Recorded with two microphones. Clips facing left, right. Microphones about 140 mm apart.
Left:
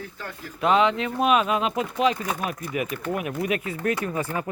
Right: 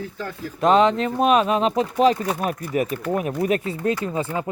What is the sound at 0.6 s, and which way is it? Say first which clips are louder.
Speech: right 4 dB; 40° right (ahead or behind).